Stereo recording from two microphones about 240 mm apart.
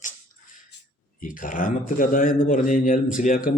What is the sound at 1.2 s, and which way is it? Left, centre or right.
A man's voice, left.